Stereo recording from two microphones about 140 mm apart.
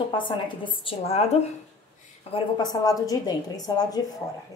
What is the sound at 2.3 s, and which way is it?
A woman's voice, 30° left (ahead or behind).